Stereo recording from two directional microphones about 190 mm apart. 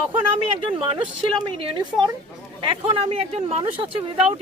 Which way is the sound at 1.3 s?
25° right (ahead or behind).